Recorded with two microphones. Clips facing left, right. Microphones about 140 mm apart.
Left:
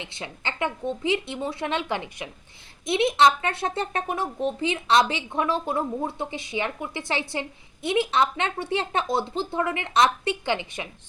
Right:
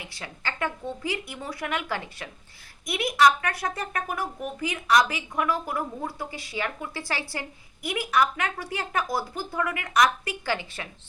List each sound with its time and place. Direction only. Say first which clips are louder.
0.0 s speech: left 2 dB; 20° left (ahead or behind)